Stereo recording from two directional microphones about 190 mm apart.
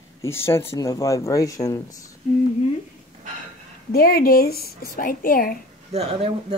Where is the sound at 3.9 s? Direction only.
50° left (ahead or behind).